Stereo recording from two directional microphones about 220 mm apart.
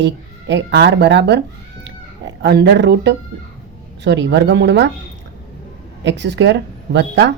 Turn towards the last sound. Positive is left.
turn(degrees=-55)  # may be behind; listen again after turning